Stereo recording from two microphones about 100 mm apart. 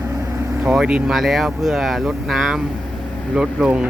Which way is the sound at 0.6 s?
10° right (ahead or behind).